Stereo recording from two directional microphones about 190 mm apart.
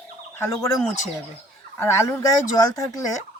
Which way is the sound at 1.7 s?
15° left (ahead or behind).